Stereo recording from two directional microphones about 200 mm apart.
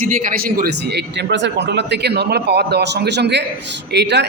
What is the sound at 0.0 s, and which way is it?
A man's voice, 40° right (ahead or behind).